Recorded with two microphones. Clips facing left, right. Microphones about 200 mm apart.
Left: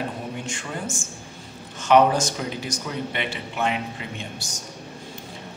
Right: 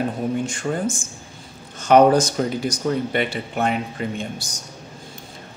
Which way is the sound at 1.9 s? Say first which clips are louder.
Right 4 dB; 45° right (ahead or behind).